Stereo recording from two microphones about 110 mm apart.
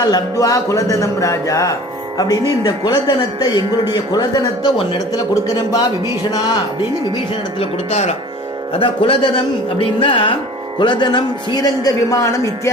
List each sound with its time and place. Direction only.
0.1 s speech: 35° left (ahead or behind)
7.6 s speech: 75° left (ahead or behind)
8.7 s speech: 55° left (ahead or behind); by 12.7 s 30° left (ahead or behind)